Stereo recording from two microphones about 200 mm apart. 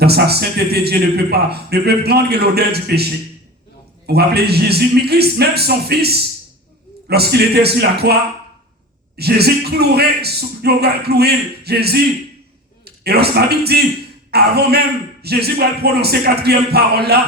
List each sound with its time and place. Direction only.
0.0 s a man's voice: 55° right (ahead or behind)